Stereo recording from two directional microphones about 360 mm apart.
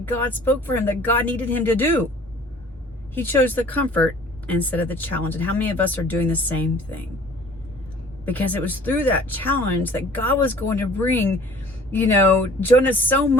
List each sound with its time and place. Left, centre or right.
0.0 s speech: centre
3.2 s speech: centre
8.2 s speech: centre
12.4 s speech: centre